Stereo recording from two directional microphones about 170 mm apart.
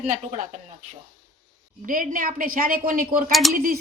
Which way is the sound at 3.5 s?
55° right (ahead or behind).